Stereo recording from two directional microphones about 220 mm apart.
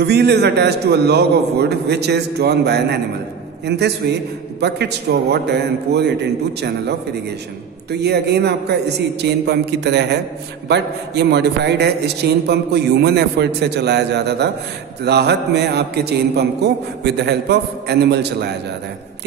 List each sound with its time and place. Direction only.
0.0 s a man's voice: 50° right (ahead or behind)
7.9 s a man's voice: 50° right (ahead or behind)